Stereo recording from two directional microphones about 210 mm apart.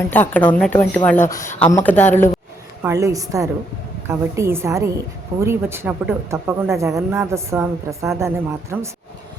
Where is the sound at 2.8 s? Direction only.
15° right (ahead or behind).